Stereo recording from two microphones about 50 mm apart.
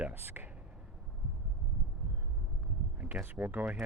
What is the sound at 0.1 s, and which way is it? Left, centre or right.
Speech, right.